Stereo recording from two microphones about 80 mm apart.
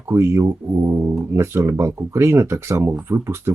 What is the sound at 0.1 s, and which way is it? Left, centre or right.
Speech, right.